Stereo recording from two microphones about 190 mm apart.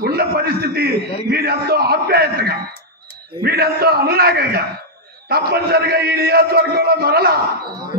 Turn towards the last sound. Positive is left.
turn(degrees=-55)  # may be behind; listen again after turning